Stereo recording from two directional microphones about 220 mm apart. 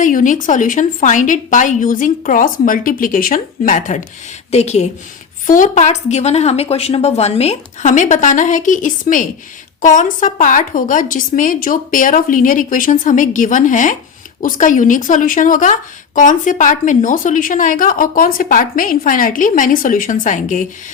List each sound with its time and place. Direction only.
0.0 s a woman's voice: 35° left (ahead or behind)